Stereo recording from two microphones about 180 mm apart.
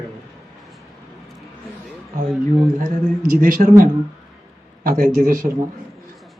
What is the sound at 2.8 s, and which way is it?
Speech, 50° right (ahead or behind).